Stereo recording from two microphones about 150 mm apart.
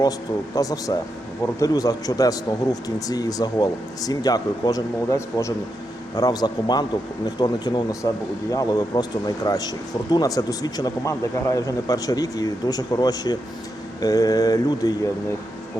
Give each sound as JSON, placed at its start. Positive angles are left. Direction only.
{"t": 0.5, "sound": "speech", "side_deg": 25}